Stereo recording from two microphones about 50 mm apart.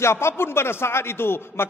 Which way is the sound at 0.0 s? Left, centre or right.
Left.